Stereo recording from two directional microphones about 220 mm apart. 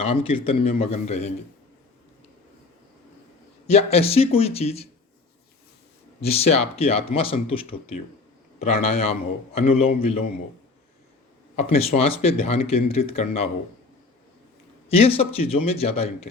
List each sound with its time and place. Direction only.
0.0 s speech: 30° left (ahead or behind)
3.7 s speech: 30° left (ahead or behind)
6.4 s speech: 25° left (ahead or behind)
11.7 s speech: 30° left (ahead or behind)
14.8 s speech: 25° left (ahead or behind)